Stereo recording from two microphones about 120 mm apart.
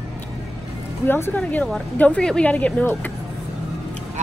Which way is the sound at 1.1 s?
15° left (ahead or behind).